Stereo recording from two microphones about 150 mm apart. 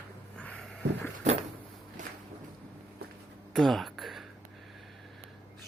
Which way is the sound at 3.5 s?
Centre (ahead or behind).